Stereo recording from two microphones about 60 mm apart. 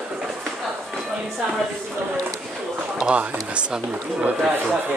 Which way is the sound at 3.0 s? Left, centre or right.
Centre.